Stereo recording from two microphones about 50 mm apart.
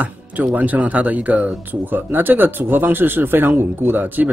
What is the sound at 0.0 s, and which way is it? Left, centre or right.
Speech, right.